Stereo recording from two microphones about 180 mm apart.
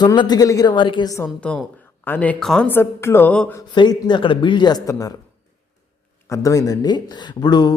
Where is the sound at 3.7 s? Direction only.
25° left (ahead or behind).